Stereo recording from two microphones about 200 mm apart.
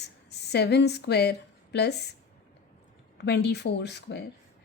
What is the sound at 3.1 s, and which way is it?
A woman's voice, 55° left (ahead or behind).